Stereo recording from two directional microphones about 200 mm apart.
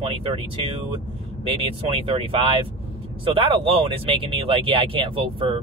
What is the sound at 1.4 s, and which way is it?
Speech, 25° right (ahead or behind).